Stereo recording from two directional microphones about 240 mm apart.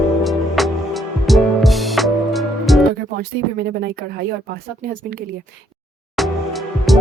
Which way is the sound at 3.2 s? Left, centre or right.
Right.